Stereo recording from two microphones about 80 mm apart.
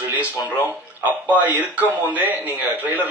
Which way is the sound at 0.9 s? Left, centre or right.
Right.